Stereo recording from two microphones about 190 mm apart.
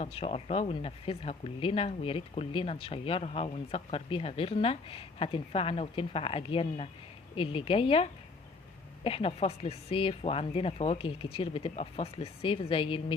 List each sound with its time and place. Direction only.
0.0 s speech: 30° left (ahead or behind)